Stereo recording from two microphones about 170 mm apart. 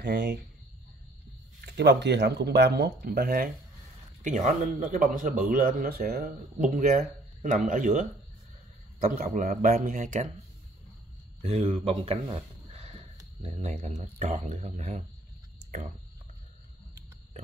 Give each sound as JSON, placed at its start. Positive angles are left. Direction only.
{"t": 0.0, "sound": "speech", "side_deg": -85}
{"t": 1.6, "sound": "speech", "side_deg": -75}
{"t": 4.2, "sound": "speech", "side_deg": -45}
{"t": 6.6, "sound": "speech", "side_deg": -50}
{"t": 9.0, "sound": "speech", "side_deg": -55}
{"t": 11.4, "sound": "speech", "side_deg": -35}